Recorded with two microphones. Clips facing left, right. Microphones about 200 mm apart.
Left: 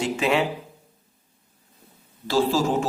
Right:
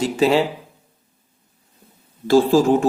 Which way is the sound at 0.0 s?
35° right (ahead or behind).